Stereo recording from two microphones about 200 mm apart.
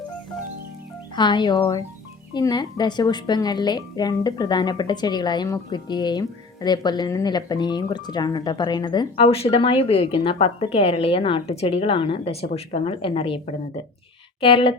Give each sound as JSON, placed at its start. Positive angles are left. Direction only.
{"t": 1.1, "sound": "speech", "side_deg": 20}
{"t": 14.4, "sound": "speech", "side_deg": 25}